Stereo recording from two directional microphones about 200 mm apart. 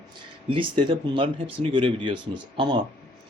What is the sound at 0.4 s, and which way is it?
Speech, 25° right (ahead or behind).